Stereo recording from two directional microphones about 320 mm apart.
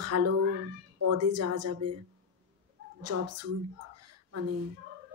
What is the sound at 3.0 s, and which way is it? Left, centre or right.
Speech, right.